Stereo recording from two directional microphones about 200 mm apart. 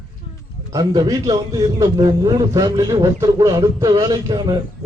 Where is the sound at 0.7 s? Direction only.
20° right (ahead or behind).